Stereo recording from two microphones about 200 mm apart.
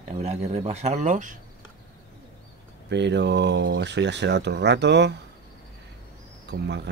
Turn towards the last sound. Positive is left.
turn(degrees=-60)  # may be behind; listen again after turning